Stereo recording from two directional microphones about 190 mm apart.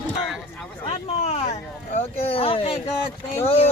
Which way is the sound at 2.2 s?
30° left (ahead or behind).